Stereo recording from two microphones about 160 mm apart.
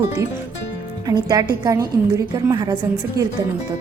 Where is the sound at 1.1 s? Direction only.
25° right (ahead or behind).